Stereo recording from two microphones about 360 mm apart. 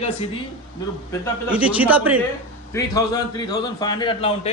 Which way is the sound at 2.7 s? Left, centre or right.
Centre.